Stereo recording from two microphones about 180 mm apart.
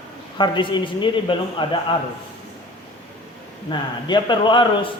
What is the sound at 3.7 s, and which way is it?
A man's voice, 25° left (ahead or behind).